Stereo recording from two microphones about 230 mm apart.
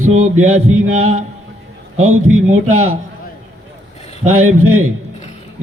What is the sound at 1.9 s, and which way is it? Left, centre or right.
Speech, right.